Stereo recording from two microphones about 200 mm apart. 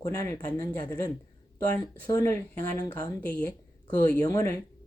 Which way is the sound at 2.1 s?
15° left (ahead or behind).